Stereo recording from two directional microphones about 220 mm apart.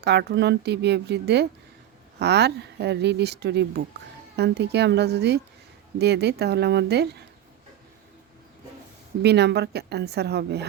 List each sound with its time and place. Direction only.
0.0 s a woman's voice: 50° right (ahead or behind)
9.2 s a woman's voice: 50° right (ahead or behind)